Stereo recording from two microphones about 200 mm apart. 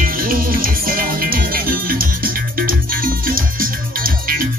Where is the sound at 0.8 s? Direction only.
45° right (ahead or behind).